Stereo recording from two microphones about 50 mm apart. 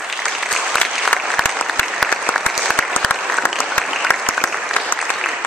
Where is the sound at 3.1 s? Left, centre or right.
Left.